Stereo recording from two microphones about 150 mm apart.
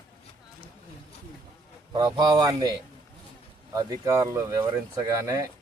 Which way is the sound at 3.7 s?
20° right (ahead or behind).